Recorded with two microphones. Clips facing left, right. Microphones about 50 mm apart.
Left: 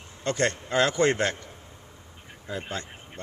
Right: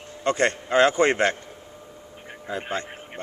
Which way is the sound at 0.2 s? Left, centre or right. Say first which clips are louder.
Right 4 dB; right.